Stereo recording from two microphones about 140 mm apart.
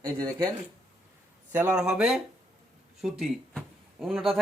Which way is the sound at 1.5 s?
10° right (ahead or behind).